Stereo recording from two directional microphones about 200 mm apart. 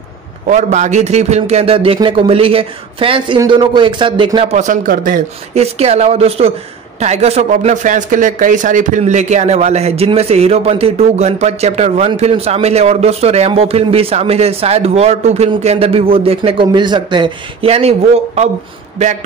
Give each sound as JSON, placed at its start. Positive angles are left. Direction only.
{"t": 0.5, "sound": "speech", "side_deg": -35}